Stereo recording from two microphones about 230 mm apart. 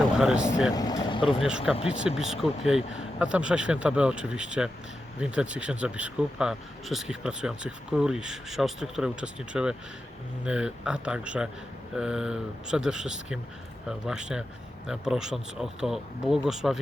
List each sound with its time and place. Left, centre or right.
0.2 s speech: centre
0.7 s speech: centre
1.4 s speech: centre